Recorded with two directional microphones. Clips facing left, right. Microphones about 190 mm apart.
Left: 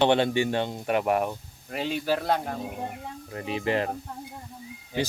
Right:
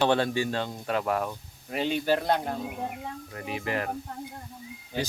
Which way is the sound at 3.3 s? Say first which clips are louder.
Left 5 dB; 25° left (ahead or behind).